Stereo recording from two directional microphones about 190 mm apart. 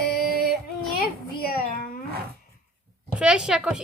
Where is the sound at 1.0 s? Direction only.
50° left (ahead or behind).